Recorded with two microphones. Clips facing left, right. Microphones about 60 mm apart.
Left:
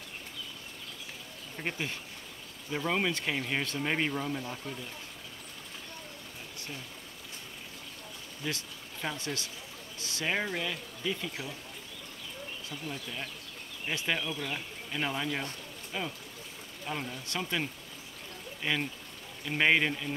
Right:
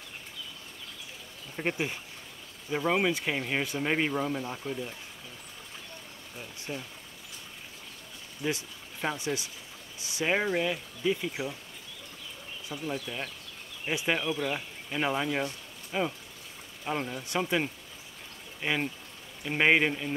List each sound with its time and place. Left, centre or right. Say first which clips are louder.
1.6 s speech: right 5 dB; centre
6.7 s speech: right 7 dB; right
8.5 s speech: right 5 dB; centre
12.6 s speech: right 7 dB; centre